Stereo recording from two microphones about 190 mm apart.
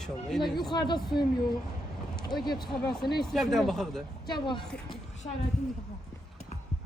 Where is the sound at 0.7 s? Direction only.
20° left (ahead or behind).